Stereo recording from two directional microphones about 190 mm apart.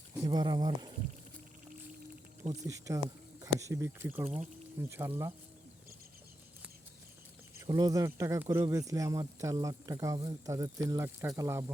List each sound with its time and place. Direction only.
0.3 s speech: 20° right (ahead or behind)
2.6 s speech: 15° right (ahead or behind)
7.7 s speech: 20° right (ahead or behind)